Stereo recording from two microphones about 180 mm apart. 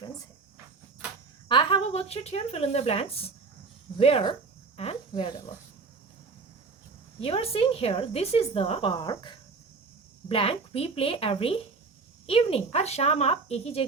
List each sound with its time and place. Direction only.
1.5 s speech: 30° left (ahead or behind)
7.2 s a woman's voice: 30° left (ahead or behind)